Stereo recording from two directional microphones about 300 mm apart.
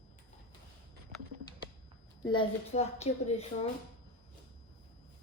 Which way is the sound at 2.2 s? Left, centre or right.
Centre.